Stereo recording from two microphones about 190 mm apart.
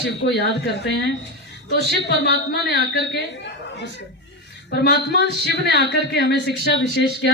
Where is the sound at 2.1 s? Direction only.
65° left (ahead or behind).